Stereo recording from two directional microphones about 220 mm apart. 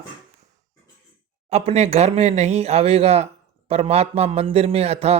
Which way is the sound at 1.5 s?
30° right (ahead or behind).